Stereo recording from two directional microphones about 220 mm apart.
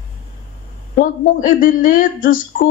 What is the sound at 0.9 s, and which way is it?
A woman's voice, 40° left (ahead or behind).